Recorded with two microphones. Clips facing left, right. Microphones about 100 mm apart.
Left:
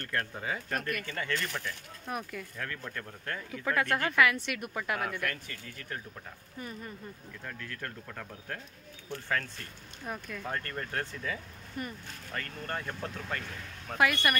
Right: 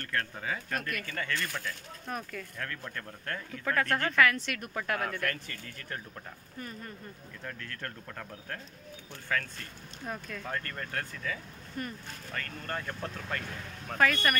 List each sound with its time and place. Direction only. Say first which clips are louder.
0.1 s speech: even; 20° left (ahead or behind)
0.7 s speech: left 1 dB; centre (ahead or behind)
1.0 s speech: even; 20° left (ahead or behind)
2.0 s speech: left 1 dB; 10° left (ahead or behind)
7.4 s speech: even; 5° left (ahead or behind)
10.0 s speech: even; 5° left (ahead or behind)
10.5 s speech: left 1 dB; 20° left (ahead or behind)
11.8 s speech: right 1 dB; 5° left (ahead or behind)